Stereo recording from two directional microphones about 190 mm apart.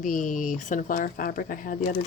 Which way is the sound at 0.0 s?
45° left (ahead or behind).